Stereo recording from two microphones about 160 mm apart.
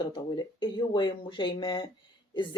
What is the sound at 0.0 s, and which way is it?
Speech, 30° left (ahead or behind).